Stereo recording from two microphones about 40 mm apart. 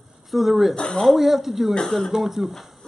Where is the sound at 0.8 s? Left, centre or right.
Centre.